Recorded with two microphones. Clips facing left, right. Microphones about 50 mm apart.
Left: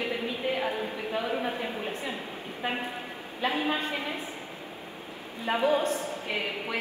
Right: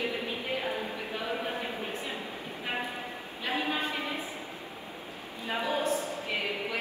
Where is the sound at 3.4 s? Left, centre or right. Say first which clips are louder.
Left 3 dB; left.